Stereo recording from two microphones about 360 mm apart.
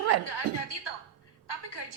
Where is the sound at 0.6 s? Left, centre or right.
Left.